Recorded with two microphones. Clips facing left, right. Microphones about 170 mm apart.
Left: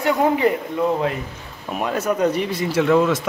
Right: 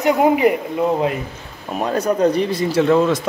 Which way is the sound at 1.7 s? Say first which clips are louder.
Right 3 dB; 30° right (ahead or behind).